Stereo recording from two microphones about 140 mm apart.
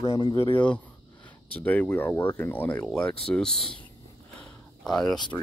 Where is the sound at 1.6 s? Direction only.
10° left (ahead or behind).